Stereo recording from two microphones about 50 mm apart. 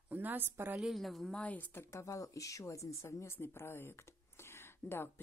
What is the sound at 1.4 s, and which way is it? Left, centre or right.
Speech, left.